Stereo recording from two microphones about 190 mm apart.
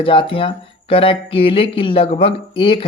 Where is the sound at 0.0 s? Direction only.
30° left (ahead or behind).